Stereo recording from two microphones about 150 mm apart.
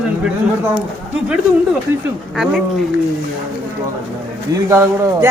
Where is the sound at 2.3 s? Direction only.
5° right (ahead or behind).